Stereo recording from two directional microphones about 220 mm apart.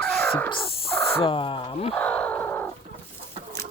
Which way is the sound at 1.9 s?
5° left (ahead or behind).